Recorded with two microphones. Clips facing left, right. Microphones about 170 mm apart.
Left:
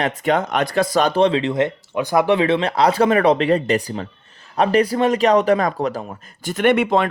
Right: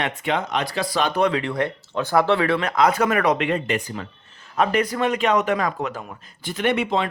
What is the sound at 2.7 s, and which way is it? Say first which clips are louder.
Speech: left 3 dB; 30° left (ahead or behind).